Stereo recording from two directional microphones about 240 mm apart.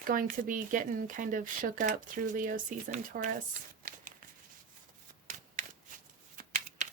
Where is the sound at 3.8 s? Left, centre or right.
Right.